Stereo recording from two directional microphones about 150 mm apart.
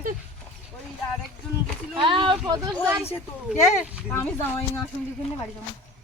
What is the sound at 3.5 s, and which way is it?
Speech, 10° right (ahead or behind).